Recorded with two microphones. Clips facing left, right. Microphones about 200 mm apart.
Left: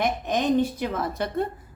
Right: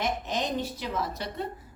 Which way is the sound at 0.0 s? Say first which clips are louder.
Left 5 dB; 55° left (ahead or behind).